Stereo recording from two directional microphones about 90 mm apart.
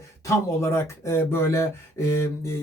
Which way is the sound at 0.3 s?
30° left (ahead or behind).